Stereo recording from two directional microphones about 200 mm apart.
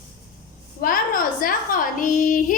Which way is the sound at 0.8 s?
45° left (ahead or behind).